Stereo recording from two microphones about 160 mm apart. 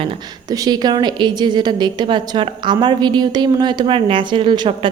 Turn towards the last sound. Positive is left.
turn(degrees=-30)  # may be behind; listen again after turning